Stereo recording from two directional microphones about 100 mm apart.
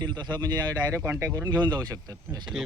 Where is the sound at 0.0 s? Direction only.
45° right (ahead or behind).